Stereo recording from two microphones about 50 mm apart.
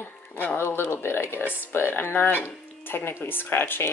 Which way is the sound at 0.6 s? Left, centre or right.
Left.